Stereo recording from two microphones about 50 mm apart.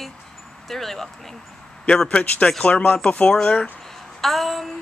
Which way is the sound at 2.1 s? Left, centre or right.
Left.